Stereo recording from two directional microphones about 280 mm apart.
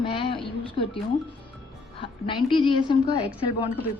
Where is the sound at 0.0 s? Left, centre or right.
Centre.